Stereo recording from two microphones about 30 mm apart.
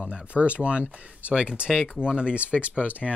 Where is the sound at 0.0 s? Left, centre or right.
Right.